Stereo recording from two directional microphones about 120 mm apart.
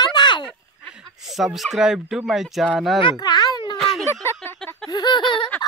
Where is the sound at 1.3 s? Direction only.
Centre (ahead or behind).